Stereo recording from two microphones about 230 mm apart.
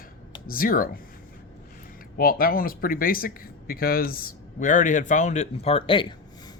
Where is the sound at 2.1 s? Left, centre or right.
Left.